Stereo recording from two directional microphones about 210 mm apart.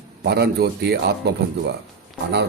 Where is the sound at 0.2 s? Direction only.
50° right (ahead or behind).